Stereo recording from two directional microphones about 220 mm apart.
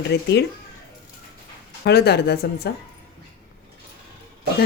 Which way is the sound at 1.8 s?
50° left (ahead or behind).